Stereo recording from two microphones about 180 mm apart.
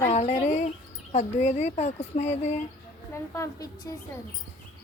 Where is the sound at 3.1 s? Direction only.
15° left (ahead or behind).